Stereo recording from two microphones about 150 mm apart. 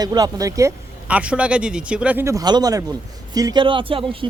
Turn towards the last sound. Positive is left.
turn(degrees=-35)  # may be behind; listen again after turning